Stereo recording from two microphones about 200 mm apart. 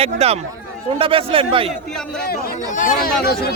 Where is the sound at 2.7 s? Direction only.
40° left (ahead or behind).